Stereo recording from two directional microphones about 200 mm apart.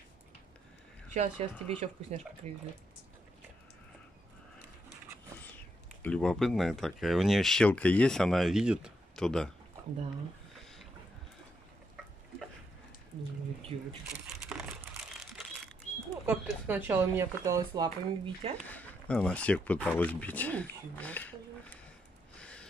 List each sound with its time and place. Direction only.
1.1 s speech: 30° right (ahead or behind)
6.0 s speech: 5° left (ahead or behind)
13.7 s speech: 30° right (ahead or behind)
14.2 s crumpling: 5° right (ahead or behind)
16.1 s speech: 10° right (ahead or behind)
17.8 s speech: 30° right (ahead or behind)
18.7 s speech: 10° left (ahead or behind)
22.3 s a sound: 5° left (ahead or behind)